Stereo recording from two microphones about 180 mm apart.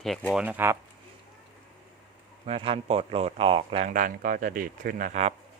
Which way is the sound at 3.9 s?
50° right (ahead or behind).